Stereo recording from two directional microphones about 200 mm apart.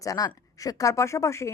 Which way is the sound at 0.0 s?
15° left (ahead or behind).